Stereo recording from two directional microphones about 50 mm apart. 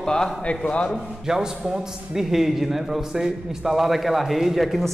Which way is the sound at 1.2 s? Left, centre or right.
Centre.